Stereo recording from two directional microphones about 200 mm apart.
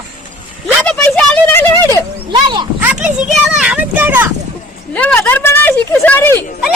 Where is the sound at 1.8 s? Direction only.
15° left (ahead or behind).